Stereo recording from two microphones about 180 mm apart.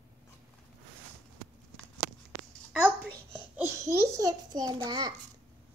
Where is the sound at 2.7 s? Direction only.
10° right (ahead or behind).